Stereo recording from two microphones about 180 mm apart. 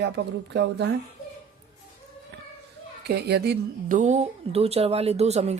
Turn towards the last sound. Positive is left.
turn(degrees=-35)  # may be behind; listen again after turning